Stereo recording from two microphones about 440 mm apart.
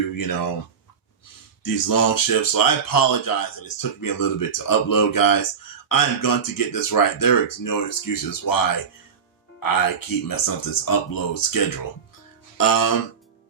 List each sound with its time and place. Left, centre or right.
0.2 s speech: left
1.6 s speech: left
9.6 s speech: left
12.5 s music: left